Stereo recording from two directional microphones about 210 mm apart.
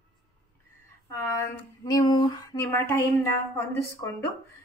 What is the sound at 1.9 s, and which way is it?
A woman's voice, 20° left (ahead or behind).